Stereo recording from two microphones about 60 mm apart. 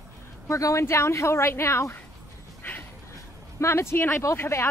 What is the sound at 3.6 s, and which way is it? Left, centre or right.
A woman's voice, left.